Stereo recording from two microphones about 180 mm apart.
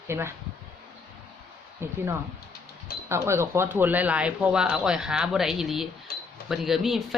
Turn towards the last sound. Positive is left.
turn(degrees=0)  # may be behind; listen again after turning